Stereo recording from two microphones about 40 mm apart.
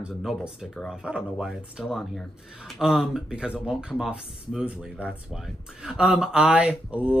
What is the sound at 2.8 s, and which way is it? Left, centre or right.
Speech, centre.